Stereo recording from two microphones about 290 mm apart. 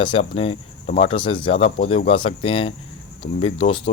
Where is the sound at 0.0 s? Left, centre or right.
Centre.